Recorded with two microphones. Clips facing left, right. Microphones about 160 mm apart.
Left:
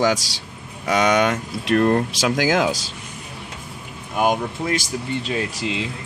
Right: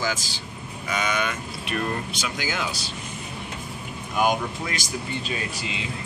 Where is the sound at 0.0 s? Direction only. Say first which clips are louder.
Left 9 dB; 80° left.